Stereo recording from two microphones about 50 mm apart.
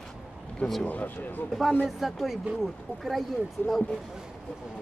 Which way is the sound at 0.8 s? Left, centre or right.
Left.